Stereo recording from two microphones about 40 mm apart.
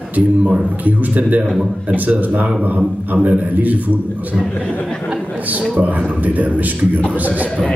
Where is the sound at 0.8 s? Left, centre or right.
Right.